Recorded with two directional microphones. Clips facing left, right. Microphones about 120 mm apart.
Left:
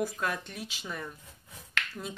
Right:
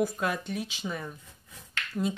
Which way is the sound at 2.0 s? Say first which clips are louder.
Right 15 dB; 20° right (ahead or behind).